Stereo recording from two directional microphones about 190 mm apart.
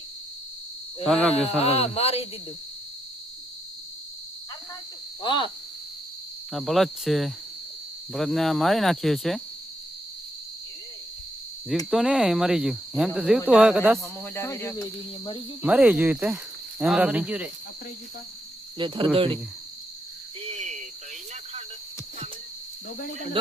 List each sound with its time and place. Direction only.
1.0 s speech: 5° left (ahead or behind)
1.5 s a man's voice: 35° left (ahead or behind)
5.2 s speech: 25° left (ahead or behind)
6.5 s speech: centre (ahead or behind)
11.9 s speech: centre (ahead or behind)
14.3 s cricket: 15° left (ahead or behind)
15.6 s cricket: 5° right (ahead or behind)
18.8 s speech: 25° right (ahead or behind)
20.5 s cricket: 40° right (ahead or behind)